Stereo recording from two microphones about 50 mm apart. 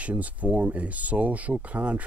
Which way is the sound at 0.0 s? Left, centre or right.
Right.